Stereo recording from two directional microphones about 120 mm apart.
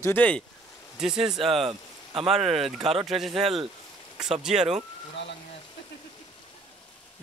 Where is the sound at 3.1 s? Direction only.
Centre (ahead or behind).